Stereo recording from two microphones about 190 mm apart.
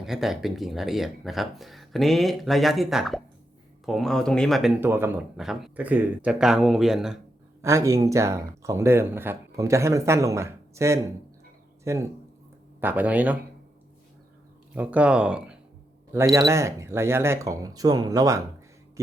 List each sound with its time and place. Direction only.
0.0 s speech: centre (ahead or behind)
4.8 s speech: 10° right (ahead or behind)
5.4 s speech: centre (ahead or behind)
7.6 s speech: 15° right (ahead or behind)
14.7 s speech: 5° right (ahead or behind)